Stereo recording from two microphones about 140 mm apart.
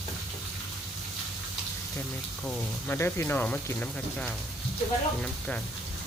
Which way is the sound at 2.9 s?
15° left (ahead or behind).